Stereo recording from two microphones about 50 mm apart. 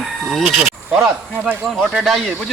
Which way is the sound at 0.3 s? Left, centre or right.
Centre.